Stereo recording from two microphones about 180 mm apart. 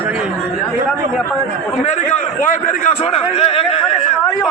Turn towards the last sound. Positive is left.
turn(degrees=35)  # may be behind; listen again after turning